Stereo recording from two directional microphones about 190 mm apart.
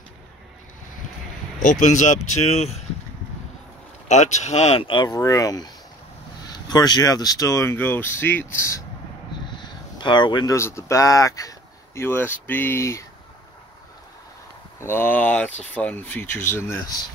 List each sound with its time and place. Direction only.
1.6 s speech: 40° left (ahead or behind)
4.1 s speech: 35° left (ahead or behind); by 13.0 s 15° left (ahead or behind)
14.8 s speech: 10° left (ahead or behind)